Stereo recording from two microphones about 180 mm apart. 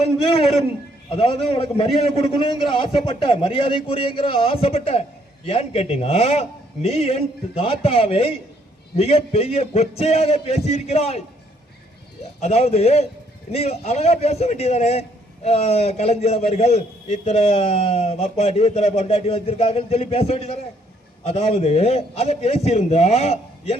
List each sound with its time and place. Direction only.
0.2 s a man's voice: 35° left (ahead or behind)
12.4 s a man's voice: 35° left (ahead or behind)